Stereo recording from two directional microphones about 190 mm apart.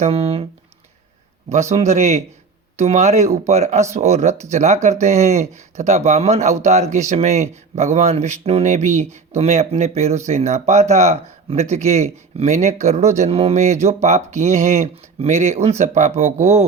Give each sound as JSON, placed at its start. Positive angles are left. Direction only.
{"t": 0.0, "sound": "speech", "side_deg": -30}
{"t": 1.7, "sound": "speech", "side_deg": -35}